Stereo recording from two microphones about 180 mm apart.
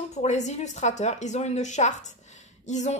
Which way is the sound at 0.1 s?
40° left (ahead or behind).